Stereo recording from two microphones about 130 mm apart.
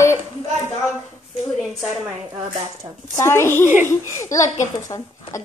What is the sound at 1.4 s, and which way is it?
Speech, centre (ahead or behind).